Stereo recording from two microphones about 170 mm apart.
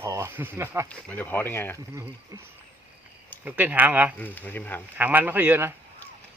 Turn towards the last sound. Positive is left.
turn(degrees=-10)  # may be behind; listen again after turning